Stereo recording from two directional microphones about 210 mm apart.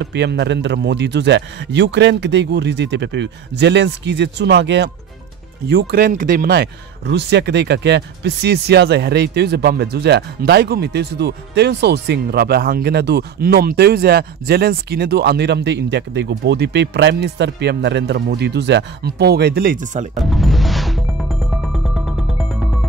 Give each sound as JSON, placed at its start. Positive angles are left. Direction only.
{"t": 0.0, "sound": "a man's voice", "side_deg": -55}
{"t": 20.2, "sound": "music", "side_deg": 0}